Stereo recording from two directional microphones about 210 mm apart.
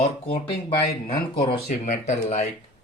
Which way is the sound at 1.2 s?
25° left (ahead or behind).